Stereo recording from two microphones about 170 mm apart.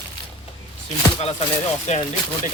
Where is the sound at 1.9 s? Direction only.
40° left (ahead or behind).